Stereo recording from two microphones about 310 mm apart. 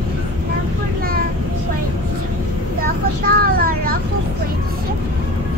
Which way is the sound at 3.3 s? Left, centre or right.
Right.